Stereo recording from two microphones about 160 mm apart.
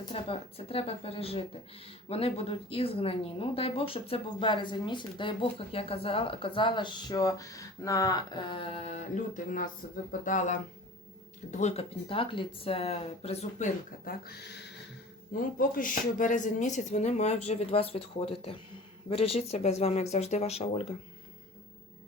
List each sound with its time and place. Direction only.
0.1 s speech: 35° left (ahead or behind); by 10.6 s 55° left (ahead or behind)
11.5 s speech: 40° left (ahead or behind)
14.0 s speech: 70° left (ahead or behind); by 20.8 s 40° left (ahead or behind)